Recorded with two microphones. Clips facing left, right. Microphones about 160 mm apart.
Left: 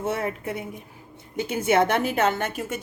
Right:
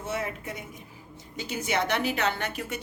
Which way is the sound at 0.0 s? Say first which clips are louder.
Left 5 dB; 60° left (ahead or behind).